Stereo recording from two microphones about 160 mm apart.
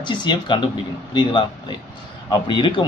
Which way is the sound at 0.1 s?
30° left (ahead or behind).